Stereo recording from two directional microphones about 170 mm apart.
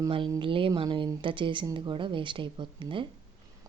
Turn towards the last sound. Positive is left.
turn(degrees=-30)  # may be behind; listen again after turning